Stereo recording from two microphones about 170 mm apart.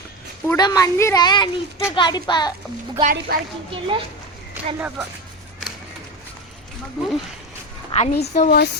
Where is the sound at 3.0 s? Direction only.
65° right (ahead or behind).